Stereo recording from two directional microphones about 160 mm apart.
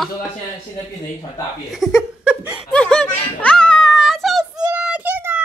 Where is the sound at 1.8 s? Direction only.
Centre (ahead or behind).